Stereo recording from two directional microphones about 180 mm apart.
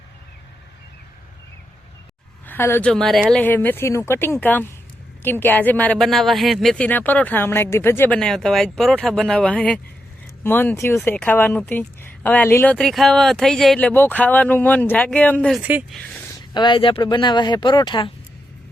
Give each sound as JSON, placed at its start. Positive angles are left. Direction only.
{"t": 2.5, "sound": "speech", "side_deg": 15}
{"t": 2.9, "sound": "a woman's voice", "side_deg": 5}
{"t": 15.6, "sound": "speech", "side_deg": -10}
{"t": 16.6, "sound": "speech", "side_deg": 25}